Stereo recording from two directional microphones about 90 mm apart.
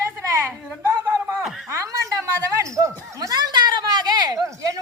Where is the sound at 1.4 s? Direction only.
5° right (ahead or behind).